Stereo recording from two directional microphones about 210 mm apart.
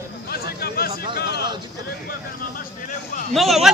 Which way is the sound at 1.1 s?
50° left (ahead or behind).